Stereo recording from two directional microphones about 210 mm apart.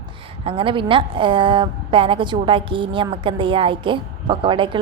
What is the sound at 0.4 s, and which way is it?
A woman's voice, 25° right (ahead or behind).